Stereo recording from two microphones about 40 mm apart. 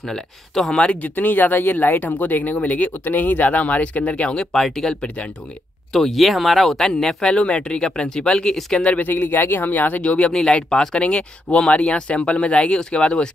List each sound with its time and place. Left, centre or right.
0.0 s speech: centre
0.8 s speech: left
4.5 s speech: centre
5.0 s speech: left
5.9 s speech: centre
7.2 s speech: left
9.0 s speech: left
9.7 s speech: left
10.3 s speech: left
11.0 s speech: left